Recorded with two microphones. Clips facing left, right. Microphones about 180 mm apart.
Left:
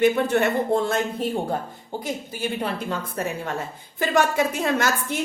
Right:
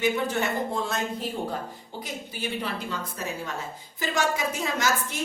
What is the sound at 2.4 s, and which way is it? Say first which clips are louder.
A woman's voice: left 3 dB; 50° left (ahead or behind).